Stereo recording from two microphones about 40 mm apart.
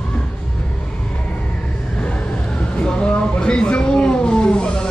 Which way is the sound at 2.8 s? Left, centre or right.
Left.